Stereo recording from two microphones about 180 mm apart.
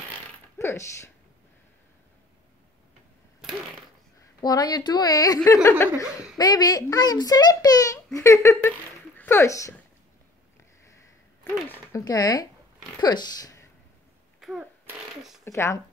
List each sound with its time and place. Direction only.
0.6 s speech: 15° left (ahead or behind)
4.4 s a child's voice: 20° left (ahead or behind)
11.7 s a child's voice: 15° left (ahead or behind)
14.4 s fart: centre (ahead or behind)
15.4 s speech: 15° left (ahead or behind)